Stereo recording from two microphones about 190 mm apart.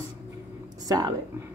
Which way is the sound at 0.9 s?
20° right (ahead or behind).